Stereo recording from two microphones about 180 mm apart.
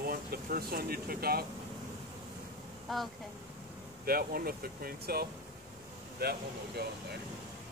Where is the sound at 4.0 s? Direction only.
55° right (ahead or behind).